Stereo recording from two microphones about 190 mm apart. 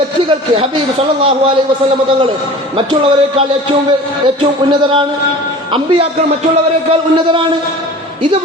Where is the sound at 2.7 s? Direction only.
30° right (ahead or behind).